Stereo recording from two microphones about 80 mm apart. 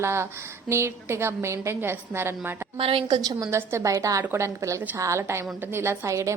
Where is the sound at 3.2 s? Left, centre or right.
Right.